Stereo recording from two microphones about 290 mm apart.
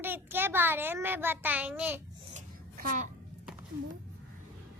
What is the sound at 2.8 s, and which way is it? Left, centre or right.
Speech, right.